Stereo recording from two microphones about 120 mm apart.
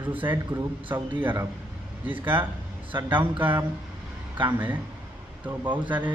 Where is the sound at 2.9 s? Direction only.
15° right (ahead or behind).